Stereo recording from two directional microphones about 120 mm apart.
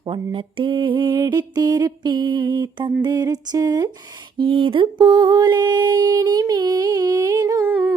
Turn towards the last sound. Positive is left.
turn(degrees=-15)  # may be behind; listen again after turning